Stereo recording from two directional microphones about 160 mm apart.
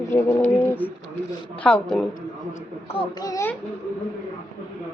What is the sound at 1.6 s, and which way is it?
Speech, 5° left (ahead or behind).